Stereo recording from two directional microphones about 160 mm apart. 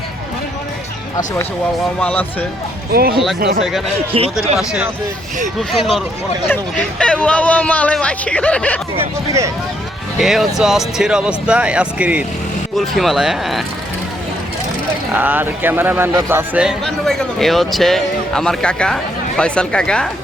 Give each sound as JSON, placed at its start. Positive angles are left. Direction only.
{"t": 2.0, "sound": "speech", "side_deg": 10}
{"t": 2.9, "sound": "speech", "side_deg": -70}
{"t": 3.6, "sound": "speech", "side_deg": 0}
{"t": 7.0, "sound": "speech", "side_deg": 5}
{"t": 9.0, "sound": "speech", "side_deg": -20}
{"t": 10.2, "sound": "speech", "side_deg": 0}
{"t": 15.1, "sound": "a man's voice", "side_deg": -10}
{"t": 16.8, "sound": "speech", "side_deg": 5}